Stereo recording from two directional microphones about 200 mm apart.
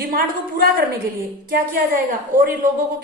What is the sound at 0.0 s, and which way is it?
A woman's voice, 50° right (ahead or behind).